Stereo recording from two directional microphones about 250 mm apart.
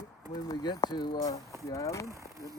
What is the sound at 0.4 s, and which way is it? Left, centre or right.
Speech, centre.